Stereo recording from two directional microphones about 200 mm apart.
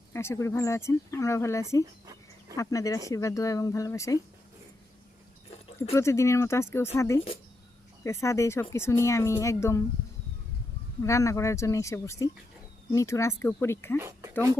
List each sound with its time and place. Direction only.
0.1 s speech: 15° left (ahead or behind)
5.9 s speech: 15° left (ahead or behind)
11.0 s speech: 15° left (ahead or behind)